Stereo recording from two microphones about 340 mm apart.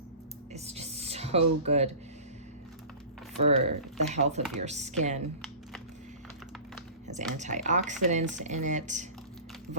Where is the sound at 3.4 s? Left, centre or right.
Centre.